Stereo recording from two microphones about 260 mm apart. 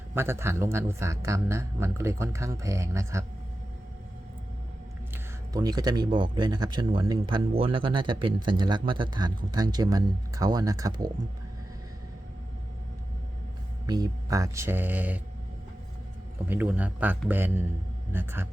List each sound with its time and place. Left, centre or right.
0.1 s speech: centre
5.1 s speech: centre
13.8 s speech: centre
16.5 s speech: centre